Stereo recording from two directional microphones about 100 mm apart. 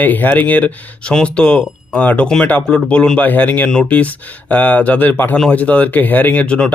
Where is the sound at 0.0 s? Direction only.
15° left (ahead or behind).